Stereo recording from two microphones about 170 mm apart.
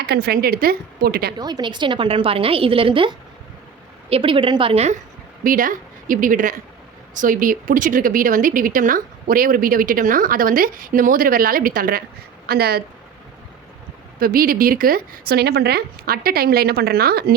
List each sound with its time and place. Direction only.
0.0 s speech: 70° right (ahead or behind)
1.4 s a woman's voice: 25° right (ahead or behind)
5.4 s a woman's voice: 55° right (ahead or behind)
14.2 s speech: 60° right (ahead or behind)